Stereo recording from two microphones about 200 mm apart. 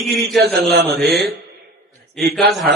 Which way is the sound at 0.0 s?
Centre (ahead or behind).